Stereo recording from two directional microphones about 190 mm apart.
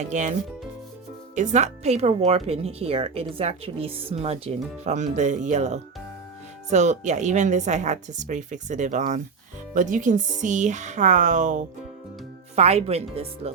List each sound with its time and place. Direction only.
0.0 s speech: 40° right (ahead or behind)
1.4 s speech: 40° right (ahead or behind)